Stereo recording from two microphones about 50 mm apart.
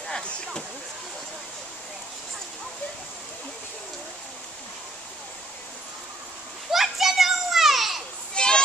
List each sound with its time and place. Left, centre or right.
6.7 s children playing: centre
8.4 s children playing: centre